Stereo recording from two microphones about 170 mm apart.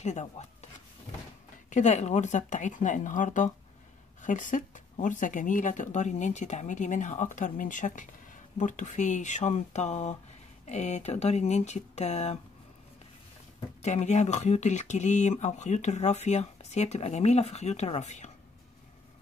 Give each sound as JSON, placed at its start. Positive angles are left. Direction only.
{"t": 0.0, "sound": "speech", "side_deg": 45}
{"t": 1.7, "sound": "speech", "side_deg": 45}
{"t": 13.8, "sound": "speech", "side_deg": 40}